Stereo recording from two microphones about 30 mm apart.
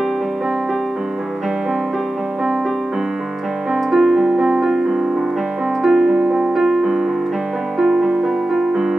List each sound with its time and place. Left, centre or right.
3.7 s piano: centre
7.8 s music: centre